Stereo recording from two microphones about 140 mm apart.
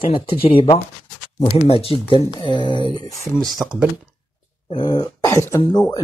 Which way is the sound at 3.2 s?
Centre (ahead or behind).